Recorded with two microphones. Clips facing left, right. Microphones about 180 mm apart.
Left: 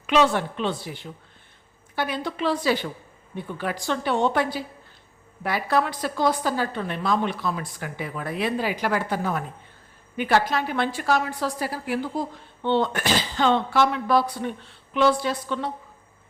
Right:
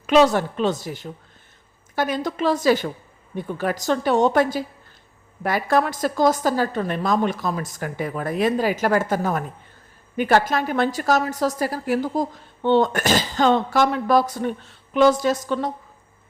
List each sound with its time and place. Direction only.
0.1 s a woman's voice: 40° right (ahead or behind)